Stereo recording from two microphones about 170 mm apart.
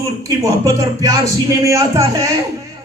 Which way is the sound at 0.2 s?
20° right (ahead or behind).